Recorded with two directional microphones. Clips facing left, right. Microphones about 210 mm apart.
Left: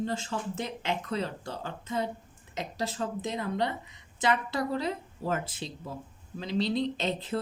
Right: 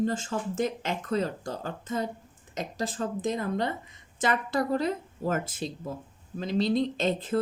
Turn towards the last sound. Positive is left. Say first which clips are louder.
# right 3 dB
turn(degrees=-50)  # may be behind; listen again after turning